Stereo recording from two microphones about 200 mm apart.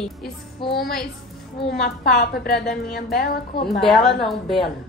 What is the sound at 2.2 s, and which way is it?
A woman's voice, 50° left (ahead or behind).